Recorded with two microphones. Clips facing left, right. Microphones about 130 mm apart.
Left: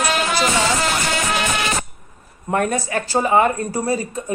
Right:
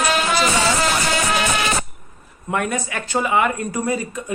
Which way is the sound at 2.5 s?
40° left (ahead or behind).